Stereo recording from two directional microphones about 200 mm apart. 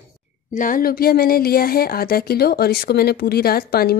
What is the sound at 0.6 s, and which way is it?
Speech, 45° left (ahead or behind).